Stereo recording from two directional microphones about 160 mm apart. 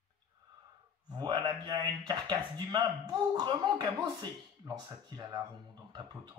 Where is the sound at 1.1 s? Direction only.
25° right (ahead or behind).